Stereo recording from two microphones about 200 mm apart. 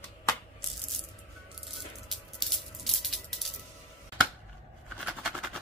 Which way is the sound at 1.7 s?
Centre (ahead or behind).